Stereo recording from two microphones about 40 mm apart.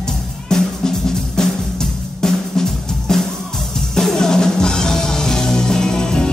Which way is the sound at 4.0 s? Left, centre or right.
Centre.